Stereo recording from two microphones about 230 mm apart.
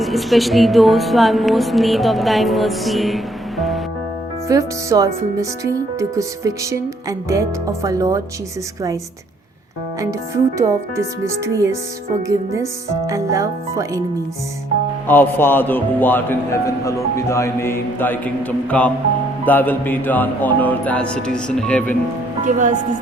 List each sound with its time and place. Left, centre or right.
0.0 s a woman's voice: centre
4.4 s speech: centre
10.0 s speech: centre
15.0 s speech: centre
22.4 s speech: right